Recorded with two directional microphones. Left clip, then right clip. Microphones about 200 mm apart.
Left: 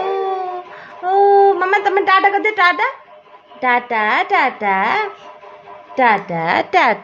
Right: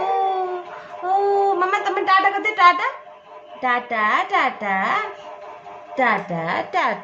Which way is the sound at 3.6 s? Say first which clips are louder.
Left 5 dB; 45° left (ahead or behind).